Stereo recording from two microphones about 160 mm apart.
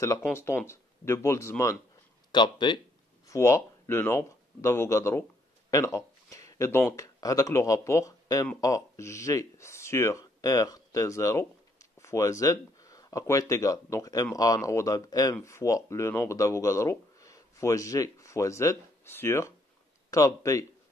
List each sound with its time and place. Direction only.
0.0 s speech: 15° left (ahead or behind)
2.3 s speech: 30° left (ahead or behind)
3.3 s speech: 20° left (ahead or behind)